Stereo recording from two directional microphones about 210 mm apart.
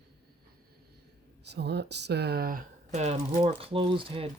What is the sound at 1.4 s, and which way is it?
Speech, 50° right (ahead or behind).